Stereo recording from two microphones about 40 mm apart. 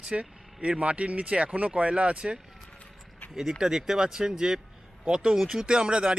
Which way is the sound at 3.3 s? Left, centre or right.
Centre.